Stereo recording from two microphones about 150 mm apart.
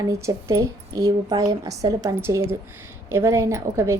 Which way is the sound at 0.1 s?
20° right (ahead or behind).